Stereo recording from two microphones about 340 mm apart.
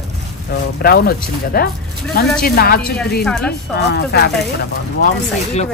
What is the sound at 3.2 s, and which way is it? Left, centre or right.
Speech, centre.